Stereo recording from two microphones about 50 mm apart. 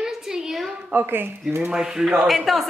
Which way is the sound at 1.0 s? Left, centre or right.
Right.